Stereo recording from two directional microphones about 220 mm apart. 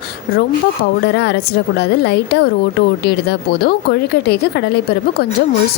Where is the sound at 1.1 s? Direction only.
50° left (ahead or behind).